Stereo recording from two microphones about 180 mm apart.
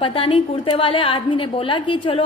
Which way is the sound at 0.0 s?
30° left (ahead or behind).